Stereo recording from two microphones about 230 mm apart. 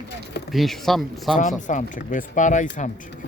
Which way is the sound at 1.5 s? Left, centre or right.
Left.